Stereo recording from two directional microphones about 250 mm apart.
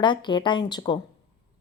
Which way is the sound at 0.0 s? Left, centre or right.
Centre.